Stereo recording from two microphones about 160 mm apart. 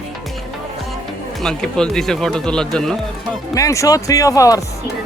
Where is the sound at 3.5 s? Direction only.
20° left (ahead or behind).